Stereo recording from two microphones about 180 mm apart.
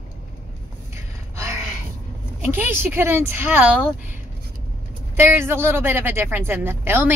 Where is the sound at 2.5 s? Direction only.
10° right (ahead or behind).